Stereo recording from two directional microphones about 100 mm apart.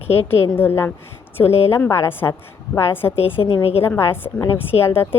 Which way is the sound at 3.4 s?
80° left.